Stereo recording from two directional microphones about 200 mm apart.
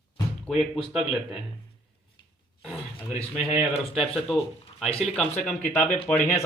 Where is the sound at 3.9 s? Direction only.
Centre (ahead or behind).